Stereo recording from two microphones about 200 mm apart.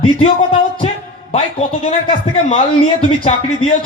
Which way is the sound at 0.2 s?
30° left (ahead or behind).